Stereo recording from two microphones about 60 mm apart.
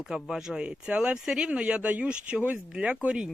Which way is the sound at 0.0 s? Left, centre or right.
Centre.